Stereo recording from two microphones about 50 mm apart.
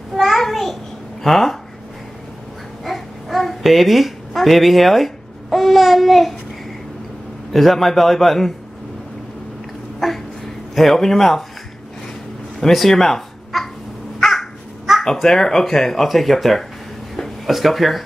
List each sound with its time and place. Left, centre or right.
0.1 s a sound: centre
1.2 s a man's voice: centre
2.8 s babbling: centre
7.5 s a man's voice: centre
9.9 s a sound: centre
10.7 s a man's voice: centre
12.5 s cat: centre
14.2 s a man's voice: centre